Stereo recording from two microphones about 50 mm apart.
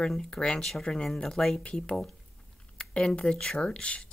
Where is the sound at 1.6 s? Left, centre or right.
Left.